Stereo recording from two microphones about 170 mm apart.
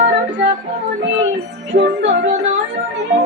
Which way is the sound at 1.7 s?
60° right (ahead or behind).